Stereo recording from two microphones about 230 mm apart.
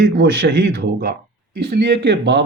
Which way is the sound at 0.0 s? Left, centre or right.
Right.